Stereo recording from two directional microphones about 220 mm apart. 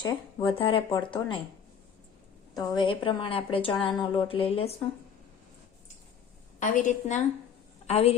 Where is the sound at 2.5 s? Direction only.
20° left (ahead or behind).